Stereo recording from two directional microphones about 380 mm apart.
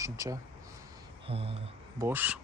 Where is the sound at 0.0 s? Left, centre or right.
Centre.